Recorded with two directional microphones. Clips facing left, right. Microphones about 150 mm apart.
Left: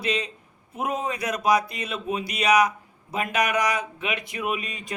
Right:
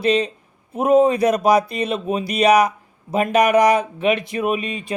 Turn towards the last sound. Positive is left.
turn(degrees=-25)  # may be behind; listen again after turning